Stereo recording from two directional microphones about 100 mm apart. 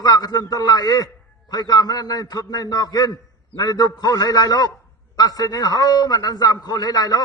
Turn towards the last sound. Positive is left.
turn(degrees=40)  # may be behind; listen again after turning